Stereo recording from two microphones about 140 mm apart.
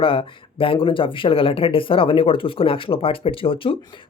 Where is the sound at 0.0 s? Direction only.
40° left (ahead or behind).